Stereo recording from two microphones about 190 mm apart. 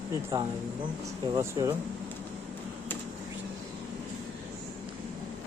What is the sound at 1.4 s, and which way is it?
Speech, 20° right (ahead or behind).